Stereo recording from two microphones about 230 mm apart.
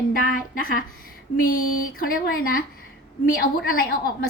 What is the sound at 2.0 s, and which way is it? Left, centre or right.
A woman's voice, left.